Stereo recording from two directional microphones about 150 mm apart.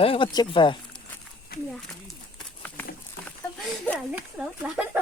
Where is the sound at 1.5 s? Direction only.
90° left.